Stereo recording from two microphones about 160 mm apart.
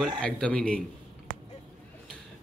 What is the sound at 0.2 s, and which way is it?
Speech, 5° left (ahead or behind).